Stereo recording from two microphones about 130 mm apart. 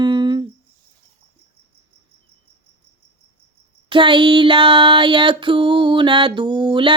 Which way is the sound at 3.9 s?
40° right (ahead or behind).